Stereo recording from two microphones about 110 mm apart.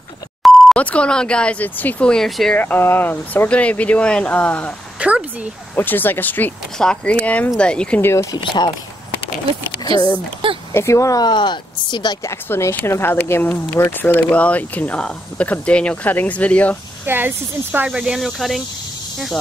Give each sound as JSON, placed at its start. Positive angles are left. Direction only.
{"t": 0.4, "sound": "beep", "side_deg": 0}
{"t": 0.7, "sound": "speech", "side_deg": 10}
{"t": 2.5, "sound": "speech", "side_deg": 15}
{"t": 5.0, "sound": "speech", "side_deg": -10}
{"t": 5.8, "sound": "speech", "side_deg": 20}
{"t": 8.0, "sound": "speech", "side_deg": 25}
{"t": 10.7, "sound": "speech", "side_deg": 25}
{"t": 12.2, "sound": "speech", "side_deg": 25}
{"t": 17.0, "sound": "speech", "side_deg": -20}